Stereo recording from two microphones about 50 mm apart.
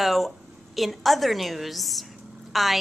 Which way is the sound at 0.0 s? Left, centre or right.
Centre.